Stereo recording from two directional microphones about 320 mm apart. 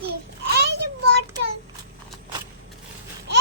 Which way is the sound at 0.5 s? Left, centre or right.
Right.